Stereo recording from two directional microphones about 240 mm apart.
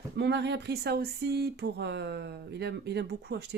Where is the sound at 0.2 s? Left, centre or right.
Right.